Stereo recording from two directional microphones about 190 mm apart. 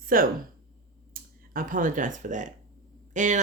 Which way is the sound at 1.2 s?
50° right (ahead or behind).